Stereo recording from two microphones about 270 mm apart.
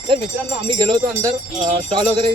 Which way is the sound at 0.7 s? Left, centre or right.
Centre.